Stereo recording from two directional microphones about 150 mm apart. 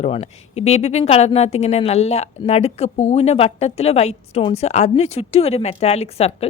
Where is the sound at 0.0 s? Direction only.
45° left (ahead or behind).